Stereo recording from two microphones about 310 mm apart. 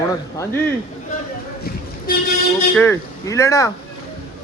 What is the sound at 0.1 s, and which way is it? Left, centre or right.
Speech, centre.